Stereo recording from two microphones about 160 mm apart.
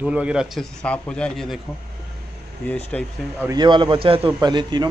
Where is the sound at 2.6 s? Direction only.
10° left (ahead or behind).